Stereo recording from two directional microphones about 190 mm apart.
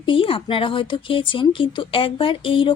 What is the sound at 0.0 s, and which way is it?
Speech, 25° left (ahead or behind).